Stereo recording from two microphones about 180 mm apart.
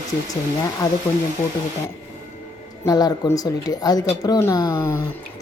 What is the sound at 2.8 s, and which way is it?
Speech, 20° left (ahead or behind).